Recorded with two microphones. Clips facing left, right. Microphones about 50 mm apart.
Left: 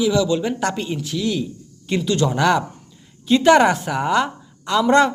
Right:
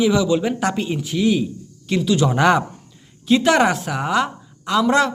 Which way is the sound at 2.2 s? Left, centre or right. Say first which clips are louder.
Right 1 dB; centre.